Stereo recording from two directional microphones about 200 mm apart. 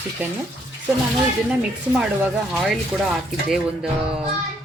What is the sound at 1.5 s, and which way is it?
Speech, 5° right (ahead or behind).